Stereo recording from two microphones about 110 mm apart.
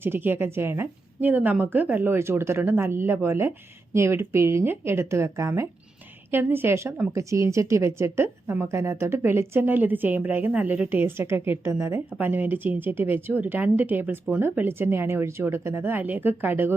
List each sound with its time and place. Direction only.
0.0 s a woman's voice: 20° right (ahead or behind)